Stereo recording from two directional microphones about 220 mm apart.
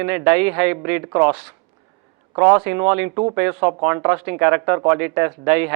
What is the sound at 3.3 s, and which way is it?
A man's voice, 10° right (ahead or behind).